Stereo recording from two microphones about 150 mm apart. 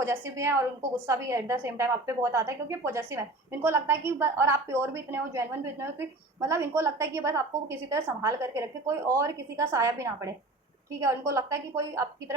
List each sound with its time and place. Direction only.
0.0 s a woman's voice: 20° right (ahead or behind)